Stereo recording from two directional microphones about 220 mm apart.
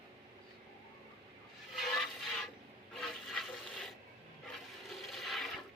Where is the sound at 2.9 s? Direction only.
Centre (ahead or behind).